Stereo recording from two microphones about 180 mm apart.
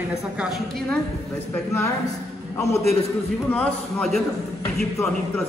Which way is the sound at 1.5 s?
15° left (ahead or behind).